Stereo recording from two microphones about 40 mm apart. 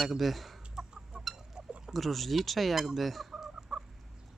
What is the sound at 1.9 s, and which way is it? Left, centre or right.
Speech, centre.